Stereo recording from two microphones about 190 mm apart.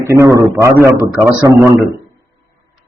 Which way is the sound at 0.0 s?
15° right (ahead or behind).